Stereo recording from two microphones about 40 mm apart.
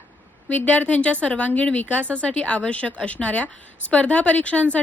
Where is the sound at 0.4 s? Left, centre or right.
Left.